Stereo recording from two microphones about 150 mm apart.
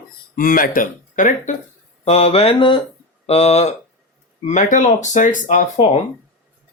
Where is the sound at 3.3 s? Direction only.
45° left (ahead or behind).